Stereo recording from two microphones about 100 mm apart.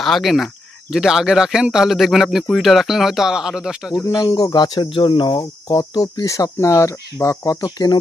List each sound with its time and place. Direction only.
0.0 s speech: centre (ahead or behind)
4.0 s speech: 35° left (ahead or behind)